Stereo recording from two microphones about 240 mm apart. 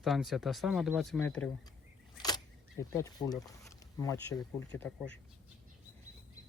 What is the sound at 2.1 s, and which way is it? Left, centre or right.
Keys jangling, centre.